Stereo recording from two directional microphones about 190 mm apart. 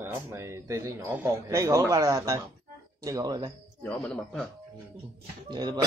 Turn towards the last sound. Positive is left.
turn(degrees=-20)  # may be behind; listen again after turning